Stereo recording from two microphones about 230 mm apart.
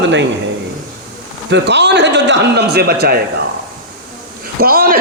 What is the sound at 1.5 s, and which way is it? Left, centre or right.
A man's voice, right.